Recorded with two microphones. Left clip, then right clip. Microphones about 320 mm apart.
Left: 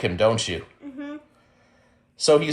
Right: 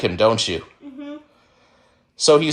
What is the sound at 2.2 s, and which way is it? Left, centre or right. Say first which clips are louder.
Speech: right 4 dB; centre.